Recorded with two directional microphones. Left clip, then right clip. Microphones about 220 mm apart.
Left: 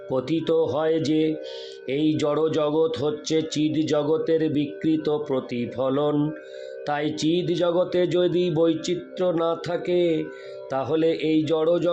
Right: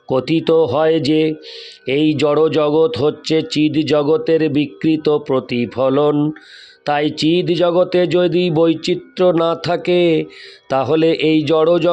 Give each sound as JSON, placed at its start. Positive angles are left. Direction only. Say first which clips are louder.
{"t": 0.1, "sound": "speech", "louder": "right 9 dB", "side_deg": -40}